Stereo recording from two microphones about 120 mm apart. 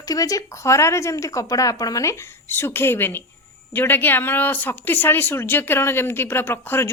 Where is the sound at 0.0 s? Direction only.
30° left (ahead or behind).